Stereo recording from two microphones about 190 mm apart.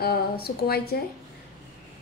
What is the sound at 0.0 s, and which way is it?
Speech, 55° left (ahead or behind).